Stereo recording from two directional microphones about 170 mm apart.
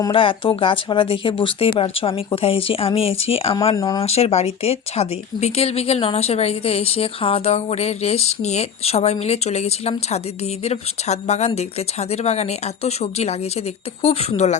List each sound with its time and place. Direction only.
0.0 s speech: 30° left (ahead or behind)
3.8 s speech: 20° left (ahead or behind)
4.0 s speech: 35° left (ahead or behind)